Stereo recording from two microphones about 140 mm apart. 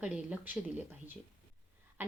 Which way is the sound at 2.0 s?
15° right (ahead or behind).